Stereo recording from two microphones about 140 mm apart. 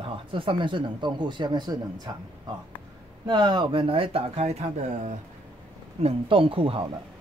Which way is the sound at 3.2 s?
30° right (ahead or behind).